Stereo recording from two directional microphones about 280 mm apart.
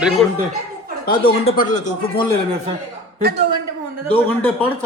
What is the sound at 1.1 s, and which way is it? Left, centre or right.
Speech, centre.